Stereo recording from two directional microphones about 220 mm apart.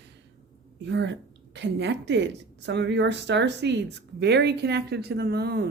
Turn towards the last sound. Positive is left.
turn(degrees=-45)  # may be behind; listen again after turning